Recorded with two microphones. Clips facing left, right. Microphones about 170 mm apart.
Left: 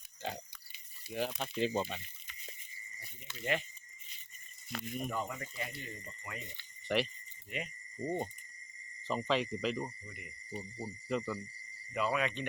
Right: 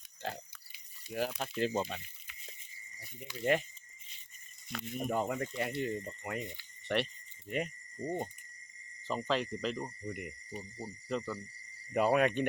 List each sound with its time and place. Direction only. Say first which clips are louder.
0.2 s pig: even; 5° right (ahead or behind)
1.1 s speech: right 1 dB; 5° right (ahead or behind)
1.9 s a sound: right 1 dB; 5° right (ahead or behind)
3.5 s speech: right 5 dB; 45° right (ahead or behind)
4.7 s speech: right 1 dB; centre (ahead or behind)
5.0 s speech: right 10 dB; 50° right (ahead or behind)
6.8 s speech: even; centre (ahead or behind)
10.1 s speech: right 11 dB; 60° right (ahead or behind)
10.5 s speech: left 5 dB; 5° left (ahead or behind)
11.9 s speech: right 6 dB; 50° right (ahead or behind)